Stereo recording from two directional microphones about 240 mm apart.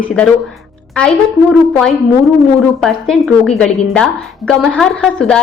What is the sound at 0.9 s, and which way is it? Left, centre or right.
A woman's voice, centre.